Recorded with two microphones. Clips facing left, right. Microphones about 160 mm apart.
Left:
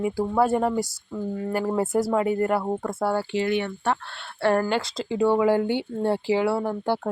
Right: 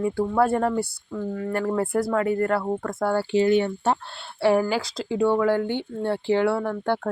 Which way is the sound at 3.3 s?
35° right (ahead or behind).